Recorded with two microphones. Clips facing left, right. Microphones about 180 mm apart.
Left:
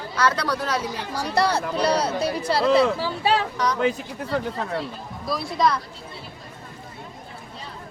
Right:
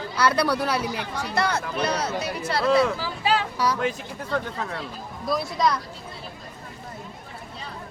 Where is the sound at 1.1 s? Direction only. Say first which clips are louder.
Left 5 dB; 35° left (ahead or behind).